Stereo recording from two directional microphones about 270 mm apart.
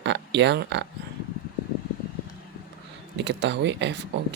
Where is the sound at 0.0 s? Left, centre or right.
Right.